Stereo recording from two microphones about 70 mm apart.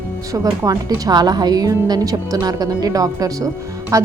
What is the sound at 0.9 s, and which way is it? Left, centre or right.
Speech, right.